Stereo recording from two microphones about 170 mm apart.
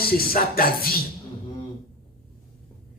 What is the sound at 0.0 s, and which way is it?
Speech, 60° left (ahead or behind).